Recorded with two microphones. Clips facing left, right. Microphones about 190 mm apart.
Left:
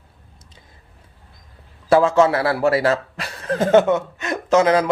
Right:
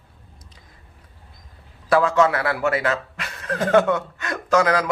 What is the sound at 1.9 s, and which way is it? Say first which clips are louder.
Speech: left 3 dB; 25° left (ahead or behind).